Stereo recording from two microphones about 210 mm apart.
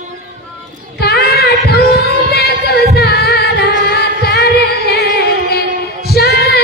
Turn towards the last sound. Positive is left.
turn(degrees=50)  # may be behind; listen again after turning